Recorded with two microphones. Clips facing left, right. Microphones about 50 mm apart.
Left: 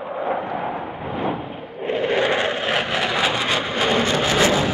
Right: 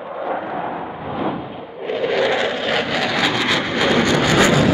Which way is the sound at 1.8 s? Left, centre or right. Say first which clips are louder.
Right 1 dB; left.